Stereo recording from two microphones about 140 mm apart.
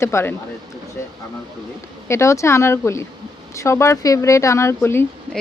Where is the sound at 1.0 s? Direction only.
20° left (ahead or behind).